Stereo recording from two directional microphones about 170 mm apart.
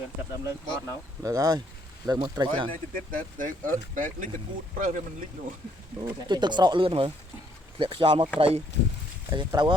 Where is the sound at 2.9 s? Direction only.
55° right (ahead or behind).